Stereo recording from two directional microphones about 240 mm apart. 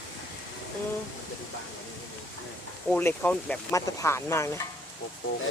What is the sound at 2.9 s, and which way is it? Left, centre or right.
Speech, centre.